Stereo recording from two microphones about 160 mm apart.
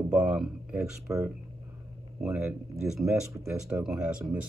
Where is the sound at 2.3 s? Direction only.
15° right (ahead or behind).